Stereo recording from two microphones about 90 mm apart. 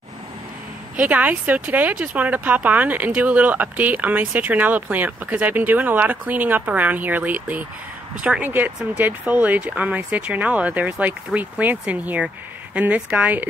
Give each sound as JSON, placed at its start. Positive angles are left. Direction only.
{"t": 0.9, "sound": "speech", "side_deg": -20}